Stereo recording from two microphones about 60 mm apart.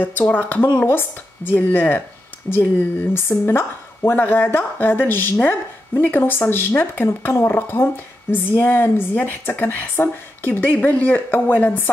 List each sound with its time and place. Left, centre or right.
0.3 s speech: left